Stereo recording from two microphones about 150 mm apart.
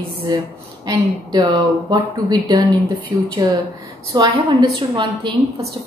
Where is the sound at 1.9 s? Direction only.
25° right (ahead or behind).